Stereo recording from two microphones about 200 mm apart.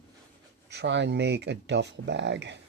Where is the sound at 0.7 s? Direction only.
60° right (ahead or behind).